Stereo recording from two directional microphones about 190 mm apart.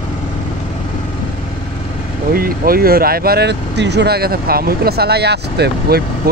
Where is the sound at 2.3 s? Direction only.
50° right (ahead or behind).